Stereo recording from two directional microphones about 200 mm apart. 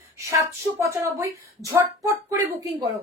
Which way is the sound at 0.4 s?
15° right (ahead or behind).